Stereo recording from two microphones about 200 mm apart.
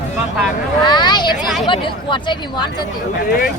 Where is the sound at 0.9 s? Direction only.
20° left (ahead or behind).